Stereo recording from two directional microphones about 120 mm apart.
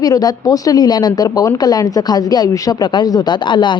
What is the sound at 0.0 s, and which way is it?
Speech, 35° left (ahead or behind).